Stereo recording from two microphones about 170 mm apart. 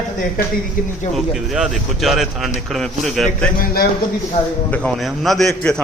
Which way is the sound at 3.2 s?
55° left (ahead or behind).